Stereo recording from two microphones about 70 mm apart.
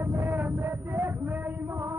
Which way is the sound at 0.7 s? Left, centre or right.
Right.